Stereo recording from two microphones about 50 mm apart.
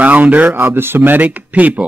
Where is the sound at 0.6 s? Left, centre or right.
Right.